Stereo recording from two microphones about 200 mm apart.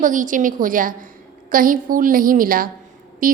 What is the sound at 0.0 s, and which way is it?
A woman's voice, 40° right (ahead or behind).